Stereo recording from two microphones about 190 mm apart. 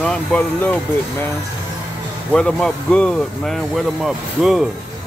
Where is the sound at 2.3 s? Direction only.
5° left (ahead or behind).